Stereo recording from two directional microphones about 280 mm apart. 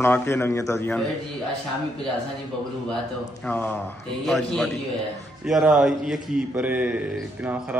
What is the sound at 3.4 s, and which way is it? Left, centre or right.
A man's voice, centre.